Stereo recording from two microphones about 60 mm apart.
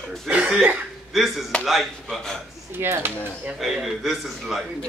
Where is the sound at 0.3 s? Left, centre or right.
Right.